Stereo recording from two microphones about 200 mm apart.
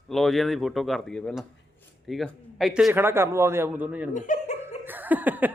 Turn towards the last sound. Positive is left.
turn(degrees=-10)  # may be behind; listen again after turning